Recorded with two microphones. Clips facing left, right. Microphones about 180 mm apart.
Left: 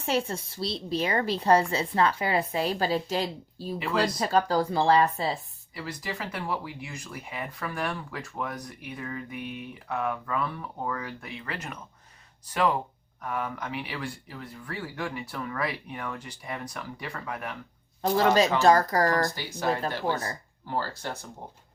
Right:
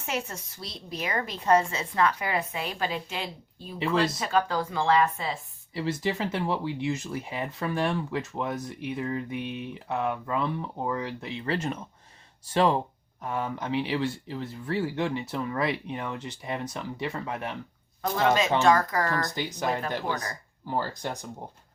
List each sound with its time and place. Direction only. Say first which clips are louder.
0.0 s a woman's voice: left 5 dB; 30° left (ahead or behind)
5.7 s speech: right 7 dB; 25° right (ahead or behind)
18.0 s a woman's voice: left 2 dB; 35° left (ahead or behind)
19.3 s speech: even; 20° right (ahead or behind)